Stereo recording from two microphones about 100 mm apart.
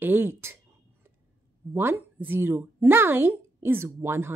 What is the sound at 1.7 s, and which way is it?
Speech, 20° right (ahead or behind).